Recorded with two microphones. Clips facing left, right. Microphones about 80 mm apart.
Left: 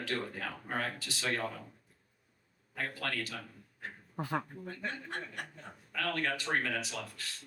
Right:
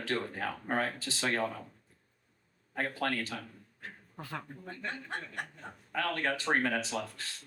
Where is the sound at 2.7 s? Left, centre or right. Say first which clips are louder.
Right 4 dB; right.